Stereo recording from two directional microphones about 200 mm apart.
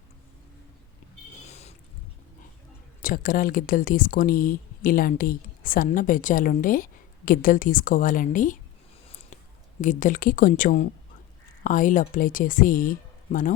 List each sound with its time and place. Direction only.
1.5 s a sound: 35° left (ahead or behind)
3.0 s speech: 45° left (ahead or behind)
9.8 s speech: 40° left (ahead or behind)